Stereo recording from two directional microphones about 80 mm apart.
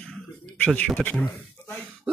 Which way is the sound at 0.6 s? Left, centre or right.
Centre.